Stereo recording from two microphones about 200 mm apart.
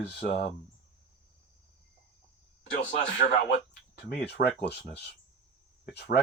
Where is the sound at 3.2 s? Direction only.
50° left (ahead or behind).